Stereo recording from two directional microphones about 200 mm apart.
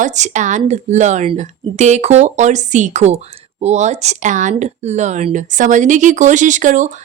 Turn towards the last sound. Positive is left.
turn(degrees=-40)  # may be behind; listen again after turning